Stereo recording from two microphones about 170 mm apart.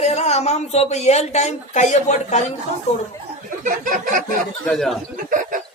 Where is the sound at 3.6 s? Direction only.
50° right (ahead or behind).